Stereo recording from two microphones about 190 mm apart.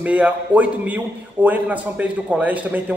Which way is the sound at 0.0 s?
5° right (ahead or behind).